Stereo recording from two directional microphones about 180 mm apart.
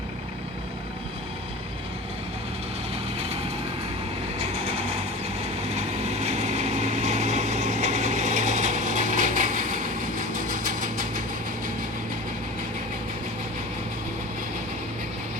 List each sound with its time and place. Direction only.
4.4 s vehicle: 35° right (ahead or behind)